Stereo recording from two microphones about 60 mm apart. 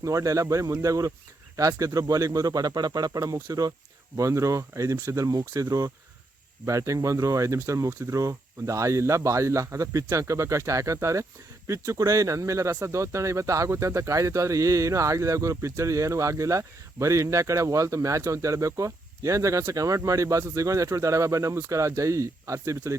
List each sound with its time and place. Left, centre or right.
0.0 s speech: right
4.2 s speech: right
6.7 s speech: right